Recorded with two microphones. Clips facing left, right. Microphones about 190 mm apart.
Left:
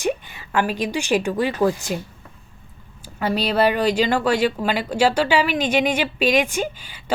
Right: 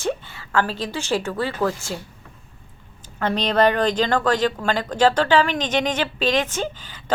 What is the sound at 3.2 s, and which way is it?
A woman's voice, 5° left (ahead or behind).